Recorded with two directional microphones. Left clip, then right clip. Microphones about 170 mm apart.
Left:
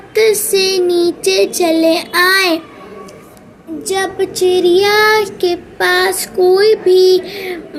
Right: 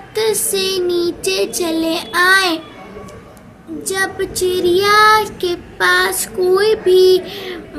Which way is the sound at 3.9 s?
10° left (ahead or behind).